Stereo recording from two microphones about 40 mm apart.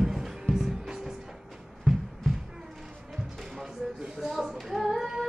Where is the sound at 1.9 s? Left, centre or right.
Left.